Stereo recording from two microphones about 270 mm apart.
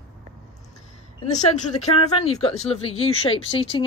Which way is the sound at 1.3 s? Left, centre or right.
Left.